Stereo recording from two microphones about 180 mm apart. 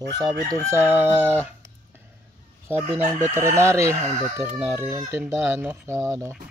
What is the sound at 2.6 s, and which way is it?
Speech, 15° right (ahead or behind).